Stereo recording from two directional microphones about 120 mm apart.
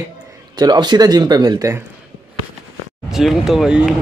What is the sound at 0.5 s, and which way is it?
Speech, 35° right (ahead or behind).